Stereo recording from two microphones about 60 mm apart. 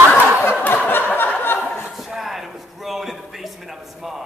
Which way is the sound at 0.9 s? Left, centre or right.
Left.